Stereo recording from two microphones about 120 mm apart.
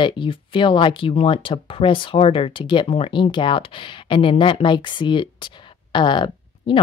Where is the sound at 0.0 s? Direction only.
45° left (ahead or behind).